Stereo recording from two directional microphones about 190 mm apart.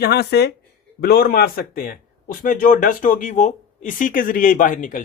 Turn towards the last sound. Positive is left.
turn(degrees=45)  # may be behind; listen again after turning